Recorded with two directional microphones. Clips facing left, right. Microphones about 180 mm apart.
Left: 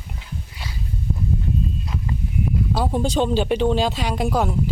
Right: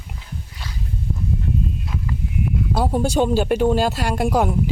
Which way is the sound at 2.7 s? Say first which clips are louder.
Right 3 dB; 10° right (ahead or behind).